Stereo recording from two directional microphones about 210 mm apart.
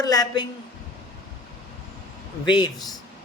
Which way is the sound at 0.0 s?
15° left (ahead or behind).